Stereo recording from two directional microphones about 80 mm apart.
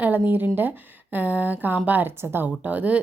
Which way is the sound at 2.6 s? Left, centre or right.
Centre.